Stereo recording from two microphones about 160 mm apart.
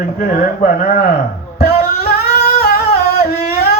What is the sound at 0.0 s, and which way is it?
Speech, 70° left (ahead or behind).